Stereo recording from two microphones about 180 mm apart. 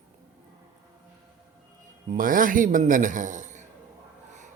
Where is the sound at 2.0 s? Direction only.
50° right (ahead or behind).